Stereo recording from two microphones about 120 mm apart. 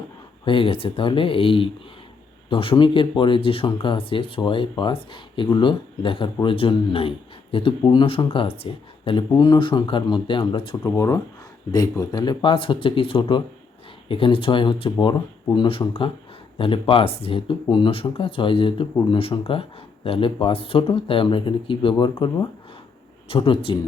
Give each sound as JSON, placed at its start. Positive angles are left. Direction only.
{"t": 0.4, "sound": "speech", "side_deg": 45}
{"t": 9.3, "sound": "speech", "side_deg": 40}
{"t": 10.8, "sound": "speech", "side_deg": 25}
{"t": 23.3, "sound": "speech", "side_deg": 45}